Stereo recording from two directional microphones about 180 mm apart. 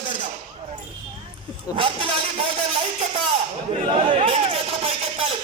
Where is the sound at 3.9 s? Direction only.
30° right (ahead or behind).